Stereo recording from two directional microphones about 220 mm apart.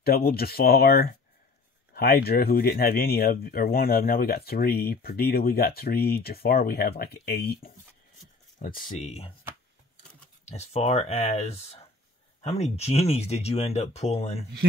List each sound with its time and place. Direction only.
0.0 s speech: 45° left (ahead or behind)
10.5 s speech: 30° left (ahead or behind)